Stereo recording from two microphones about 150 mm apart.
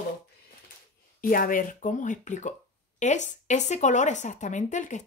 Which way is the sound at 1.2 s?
70° left (ahead or behind).